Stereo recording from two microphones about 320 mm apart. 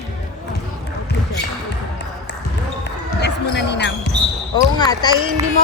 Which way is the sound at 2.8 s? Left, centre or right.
Left.